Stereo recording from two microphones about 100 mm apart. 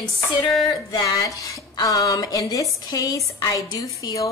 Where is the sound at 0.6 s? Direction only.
45° left (ahead or behind).